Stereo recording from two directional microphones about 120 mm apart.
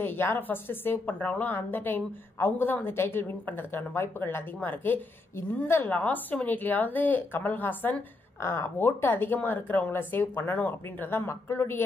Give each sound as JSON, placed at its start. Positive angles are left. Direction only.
{"t": 0.0, "sound": "a woman's voice", "side_deg": 20}